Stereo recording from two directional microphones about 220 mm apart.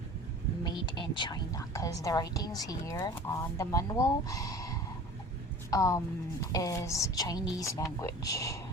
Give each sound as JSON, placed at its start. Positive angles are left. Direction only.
{"t": 0.6, "sound": "a woman's voice", "side_deg": 20}